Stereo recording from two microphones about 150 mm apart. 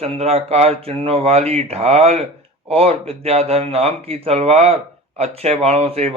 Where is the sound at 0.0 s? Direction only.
45° right (ahead or behind).